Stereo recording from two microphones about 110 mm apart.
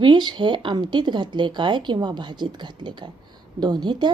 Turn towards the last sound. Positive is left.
turn(degrees=-40)  # may be behind; listen again after turning